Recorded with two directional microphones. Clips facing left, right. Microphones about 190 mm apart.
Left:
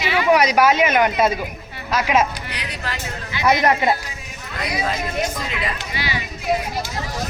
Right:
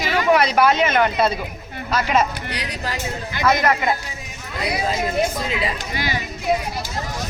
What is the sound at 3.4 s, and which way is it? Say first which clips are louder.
Speech: left 1 dB; 20° left (ahead or behind).